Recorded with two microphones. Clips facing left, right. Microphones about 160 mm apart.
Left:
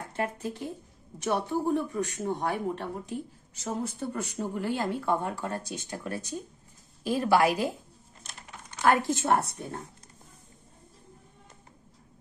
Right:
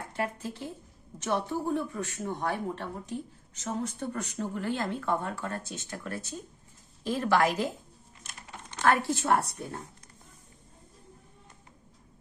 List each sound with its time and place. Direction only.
0.1 s speech: 20° left (ahead or behind)
8.8 s a woman's voice: 15° left (ahead or behind)